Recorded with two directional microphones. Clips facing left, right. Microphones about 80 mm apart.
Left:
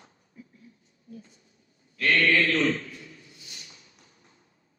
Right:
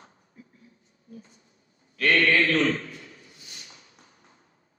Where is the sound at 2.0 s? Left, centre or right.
Right.